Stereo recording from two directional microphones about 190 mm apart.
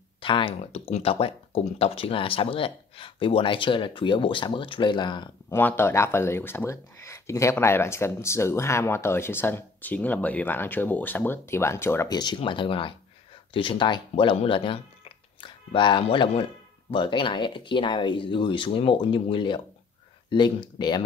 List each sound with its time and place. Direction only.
0.2 s speech: 25° left (ahead or behind)
5.5 s speech: 10° left (ahead or behind)